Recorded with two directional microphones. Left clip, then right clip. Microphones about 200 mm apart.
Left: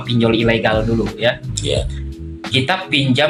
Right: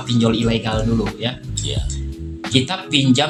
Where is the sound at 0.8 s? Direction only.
Centre (ahead or behind).